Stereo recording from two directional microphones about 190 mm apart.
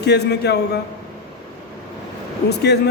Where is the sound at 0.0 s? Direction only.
60° left (ahead or behind).